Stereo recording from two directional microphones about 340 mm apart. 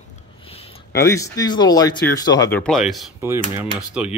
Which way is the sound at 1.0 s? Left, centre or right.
Centre.